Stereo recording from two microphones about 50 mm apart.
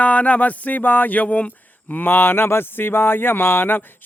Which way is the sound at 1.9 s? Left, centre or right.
Left.